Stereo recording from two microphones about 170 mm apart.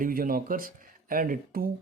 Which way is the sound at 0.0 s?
55° right (ahead or behind).